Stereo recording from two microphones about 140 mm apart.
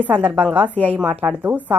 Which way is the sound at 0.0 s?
10° right (ahead or behind).